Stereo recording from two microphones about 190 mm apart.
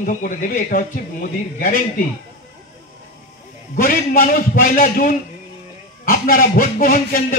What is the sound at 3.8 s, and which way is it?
A man's voice, 50° left (ahead or behind).